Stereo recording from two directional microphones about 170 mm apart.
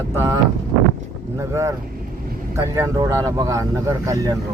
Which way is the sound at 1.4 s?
15° right (ahead or behind).